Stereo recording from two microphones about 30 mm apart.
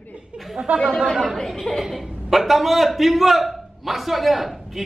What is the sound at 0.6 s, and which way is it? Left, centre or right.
Speech, right.